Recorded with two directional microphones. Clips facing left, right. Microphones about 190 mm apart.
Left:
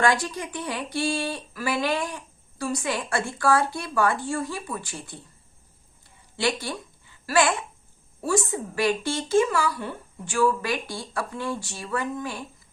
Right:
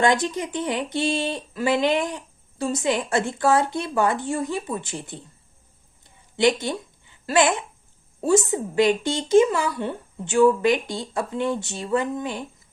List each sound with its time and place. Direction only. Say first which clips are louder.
0.0 s speech: right 3 dB; 20° right (ahead or behind)
6.3 s speech: right 6 dB; 20° right (ahead or behind)